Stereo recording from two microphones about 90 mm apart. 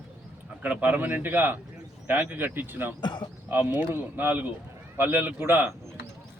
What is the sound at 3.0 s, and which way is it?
Speech, 55° left (ahead or behind).